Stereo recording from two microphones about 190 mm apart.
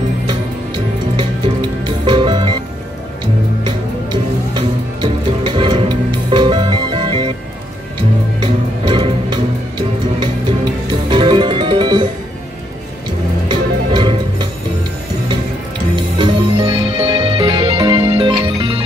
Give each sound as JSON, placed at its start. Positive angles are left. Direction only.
{"t": 1.9, "sound": "music", "side_deg": -25}
{"t": 3.6, "sound": "music", "side_deg": -25}
{"t": 8.8, "sound": "music", "side_deg": -25}
{"t": 10.9, "sound": "music", "side_deg": -25}
{"t": 13.5, "sound": "music", "side_deg": -25}
{"t": 16.2, "sound": "music", "side_deg": -25}